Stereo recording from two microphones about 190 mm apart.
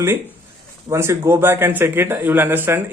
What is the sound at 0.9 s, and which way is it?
Speech, 15° right (ahead or behind).